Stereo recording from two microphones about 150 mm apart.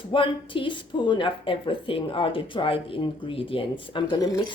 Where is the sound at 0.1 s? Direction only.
35° left (ahead or behind).